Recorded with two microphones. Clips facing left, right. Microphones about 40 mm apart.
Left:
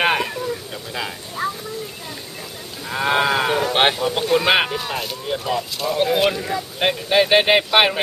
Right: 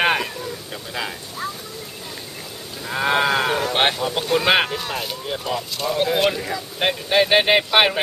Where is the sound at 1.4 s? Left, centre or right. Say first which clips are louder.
Left 5 dB; centre.